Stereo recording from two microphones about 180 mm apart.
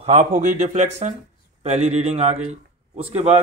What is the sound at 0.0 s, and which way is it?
Speech, 40° right (ahead or behind).